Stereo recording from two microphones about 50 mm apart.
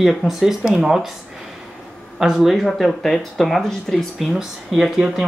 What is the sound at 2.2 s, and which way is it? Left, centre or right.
Speech, centre.